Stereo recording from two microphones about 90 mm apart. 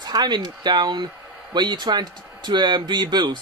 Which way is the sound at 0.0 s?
50° right (ahead or behind).